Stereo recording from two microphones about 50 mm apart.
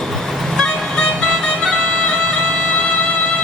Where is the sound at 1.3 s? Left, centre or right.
Centre.